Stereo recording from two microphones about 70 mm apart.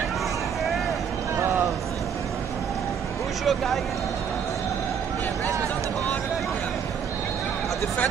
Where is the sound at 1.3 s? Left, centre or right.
Right.